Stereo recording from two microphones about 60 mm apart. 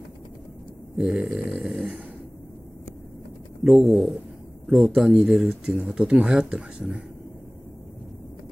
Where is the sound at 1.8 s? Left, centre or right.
Centre.